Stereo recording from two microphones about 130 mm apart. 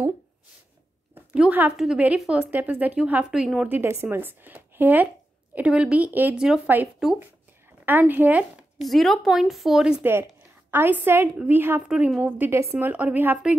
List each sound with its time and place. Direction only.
1.1 s a sound: 10° right (ahead or behind)
1.8 s a woman's voice: 10° right (ahead or behind)
8.8 s a woman's voice: centre (ahead or behind)
10.7 s a woman's voice: 15° right (ahead or behind)